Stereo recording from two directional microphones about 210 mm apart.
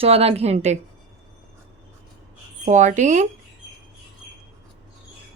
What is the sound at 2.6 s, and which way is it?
Speech, 35° right (ahead or behind).